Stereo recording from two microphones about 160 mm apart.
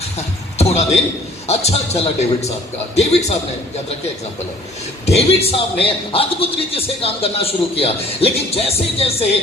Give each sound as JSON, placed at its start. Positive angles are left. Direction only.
{"t": 0.6, "sound": "a man's voice", "side_deg": 40}
{"t": 5.0, "sound": "a man's voice", "side_deg": 40}